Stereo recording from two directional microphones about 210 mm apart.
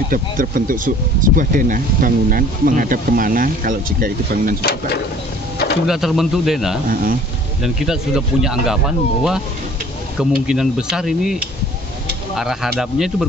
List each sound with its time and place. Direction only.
0.1 s speech: 40° right (ahead or behind)
4.6 s speech: 50° left (ahead or behind)
5.9 s speech: centre (ahead or behind)
6.9 s speech: 40° right (ahead or behind)
7.6 s speech: centre (ahead or behind)
12.4 s speech: centre (ahead or behind)